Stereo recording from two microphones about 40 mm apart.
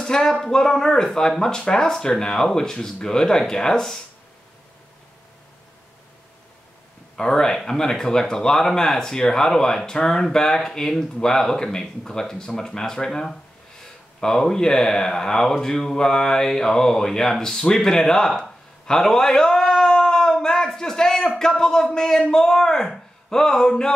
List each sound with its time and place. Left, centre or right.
0.0 s speech: centre
7.2 s speech: centre
18.4 s a sound: centre